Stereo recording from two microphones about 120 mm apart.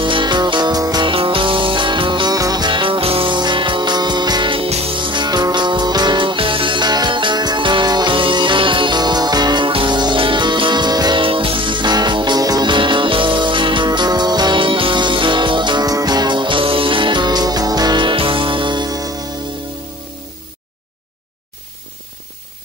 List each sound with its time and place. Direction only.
0.0 s music: 40° right (ahead or behind)